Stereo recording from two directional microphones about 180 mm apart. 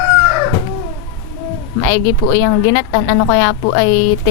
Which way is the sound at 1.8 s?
20° left (ahead or behind).